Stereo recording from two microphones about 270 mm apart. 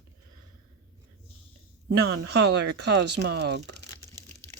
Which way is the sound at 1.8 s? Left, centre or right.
Right.